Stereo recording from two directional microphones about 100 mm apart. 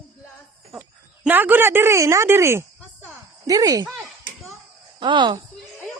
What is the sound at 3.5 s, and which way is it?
Speech, 40° right (ahead or behind).